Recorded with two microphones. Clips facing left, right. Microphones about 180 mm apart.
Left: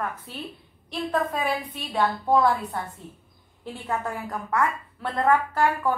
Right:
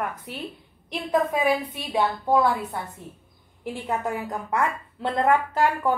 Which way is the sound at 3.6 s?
15° right (ahead or behind).